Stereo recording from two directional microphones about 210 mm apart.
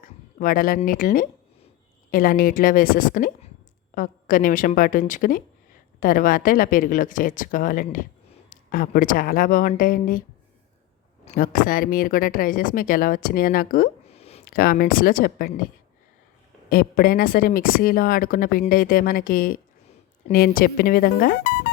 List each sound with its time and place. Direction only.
0.0 s a sound: 40° left (ahead or behind)
0.8 s a woman's voice: 40° left (ahead or behind)
11.3 s a woman's voice: 40° left (ahead or behind)
14.1 s a sound: 30° left (ahead or behind)
14.4 s speech: 45° left (ahead or behind)
16.6 s speech: 45° left (ahead or behind)